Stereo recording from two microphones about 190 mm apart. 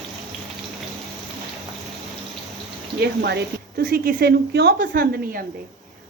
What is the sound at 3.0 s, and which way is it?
Speech, 60° right (ahead or behind).